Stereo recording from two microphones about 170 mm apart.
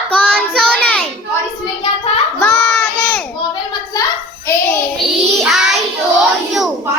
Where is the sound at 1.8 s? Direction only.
30° left (ahead or behind).